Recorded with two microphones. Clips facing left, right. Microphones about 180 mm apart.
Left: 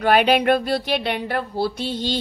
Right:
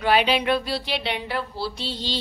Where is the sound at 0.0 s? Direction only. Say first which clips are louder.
Left 4 dB; 50° left (ahead or behind).